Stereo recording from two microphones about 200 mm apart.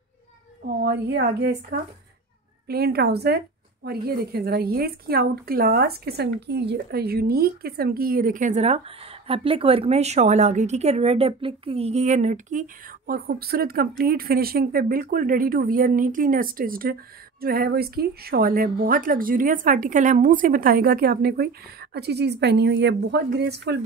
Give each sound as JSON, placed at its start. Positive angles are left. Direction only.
{"t": 0.8, "sound": "a woman's voice", "side_deg": -55}